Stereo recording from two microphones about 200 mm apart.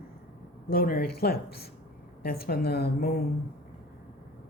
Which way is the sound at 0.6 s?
50° left (ahead or behind).